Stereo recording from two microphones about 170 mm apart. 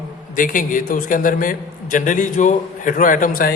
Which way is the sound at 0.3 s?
50° left (ahead or behind).